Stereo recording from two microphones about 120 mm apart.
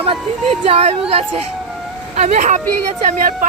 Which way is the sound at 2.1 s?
70° right (ahead or behind).